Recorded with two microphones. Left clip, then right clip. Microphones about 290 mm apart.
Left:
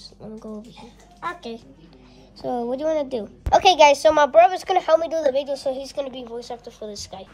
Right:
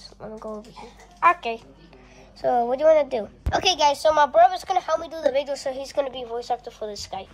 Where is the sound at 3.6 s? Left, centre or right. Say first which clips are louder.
Left 5 dB; left.